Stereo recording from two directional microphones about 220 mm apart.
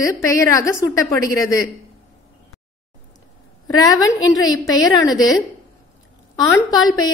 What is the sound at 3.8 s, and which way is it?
Speech, 15° left (ahead or behind).